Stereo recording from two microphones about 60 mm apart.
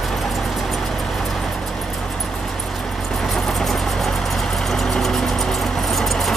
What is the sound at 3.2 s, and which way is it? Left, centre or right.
Vehicle, centre.